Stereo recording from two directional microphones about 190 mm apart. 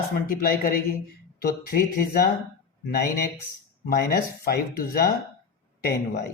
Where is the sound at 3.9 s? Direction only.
55° left (ahead or behind).